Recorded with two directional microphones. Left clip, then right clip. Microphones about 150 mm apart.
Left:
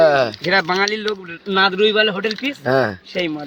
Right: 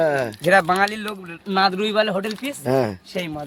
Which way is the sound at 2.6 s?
20° right (ahead or behind).